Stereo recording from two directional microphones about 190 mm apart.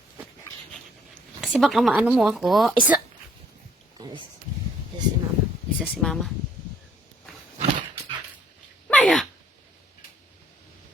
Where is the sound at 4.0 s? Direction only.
20° right (ahead or behind).